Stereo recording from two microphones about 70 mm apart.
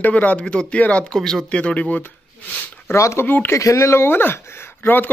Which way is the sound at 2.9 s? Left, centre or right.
Left.